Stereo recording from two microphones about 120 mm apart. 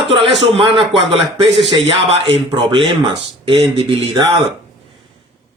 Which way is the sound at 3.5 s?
50° right (ahead or behind).